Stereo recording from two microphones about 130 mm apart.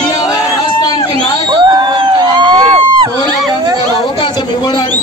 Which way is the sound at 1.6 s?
35° right (ahead or behind).